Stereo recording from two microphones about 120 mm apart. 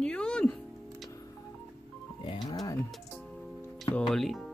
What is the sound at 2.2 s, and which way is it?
Music, 40° left (ahead or behind).